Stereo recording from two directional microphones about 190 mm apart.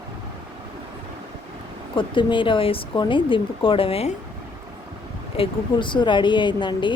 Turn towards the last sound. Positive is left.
turn(degrees=25)  # may be behind; listen again after turning